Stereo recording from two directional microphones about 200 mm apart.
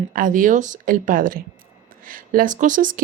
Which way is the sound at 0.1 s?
45° right (ahead or behind).